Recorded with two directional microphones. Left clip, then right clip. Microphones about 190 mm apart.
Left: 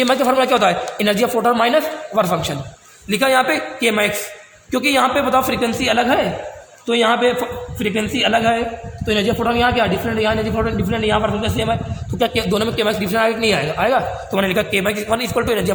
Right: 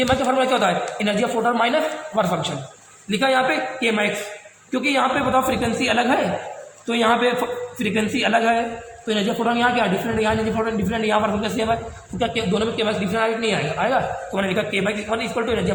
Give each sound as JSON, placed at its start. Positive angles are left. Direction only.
{"t": 0.0, "sound": "a man's voice", "side_deg": 50}
{"t": 3.1, "sound": "a man's voice", "side_deg": 55}
{"t": 12.2, "sound": "a man's voice", "side_deg": 55}